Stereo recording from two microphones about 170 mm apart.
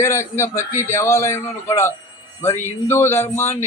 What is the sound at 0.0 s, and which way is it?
A man's voice, 15° left (ahead or behind).